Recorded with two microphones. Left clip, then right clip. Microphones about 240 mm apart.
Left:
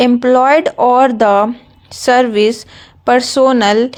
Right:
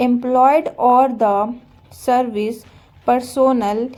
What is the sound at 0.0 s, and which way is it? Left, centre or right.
A woman's voice, left.